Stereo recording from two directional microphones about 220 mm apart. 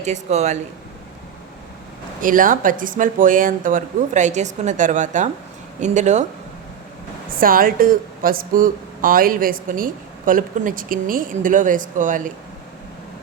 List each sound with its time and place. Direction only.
0.0 s a woman's voice: 30° right (ahead or behind)
2.2 s a woman's voice: 40° right (ahead or behind)
7.3 s a woman's voice: 40° right (ahead or behind)